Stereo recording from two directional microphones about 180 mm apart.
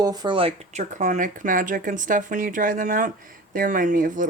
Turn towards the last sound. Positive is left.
turn(degrees=-50)  # may be behind; listen again after turning